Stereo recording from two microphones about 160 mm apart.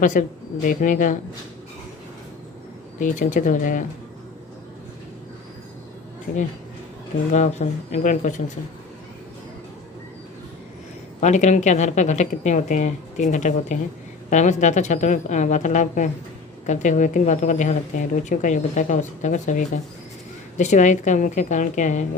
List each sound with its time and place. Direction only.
0.0 s speech: 55° left (ahead or behind)
3.0 s speech: 50° left (ahead or behind)
6.3 s speech: 60° left (ahead or behind)
7.3 s speech: 45° left (ahead or behind)
11.2 s speech: 45° left (ahead or behind)